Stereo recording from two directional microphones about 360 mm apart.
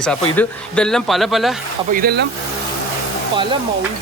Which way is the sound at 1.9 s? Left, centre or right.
Right.